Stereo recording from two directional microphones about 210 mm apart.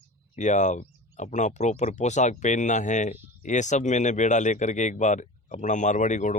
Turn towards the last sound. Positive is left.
turn(degrees=35)  # may be behind; listen again after turning